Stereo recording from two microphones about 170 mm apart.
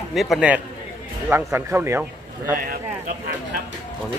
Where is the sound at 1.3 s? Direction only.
15° right (ahead or behind).